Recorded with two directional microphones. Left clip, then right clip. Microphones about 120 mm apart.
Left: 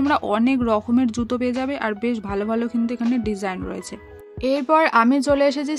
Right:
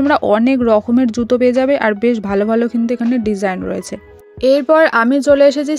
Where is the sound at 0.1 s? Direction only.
50° right (ahead or behind).